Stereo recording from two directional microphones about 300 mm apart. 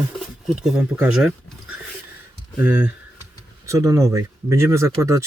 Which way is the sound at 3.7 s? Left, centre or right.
Centre.